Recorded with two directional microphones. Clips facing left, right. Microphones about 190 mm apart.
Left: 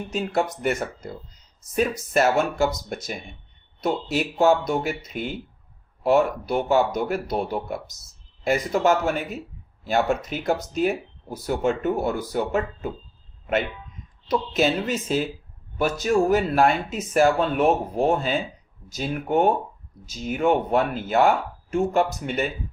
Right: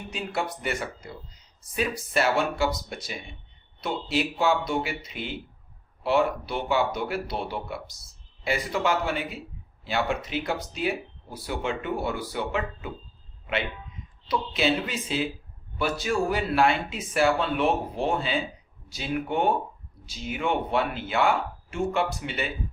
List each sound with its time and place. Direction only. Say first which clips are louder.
0.1 s speech: left 6 dB; 45° left (ahead or behind)
14.3 s speech: left 3 dB; 45° left (ahead or behind)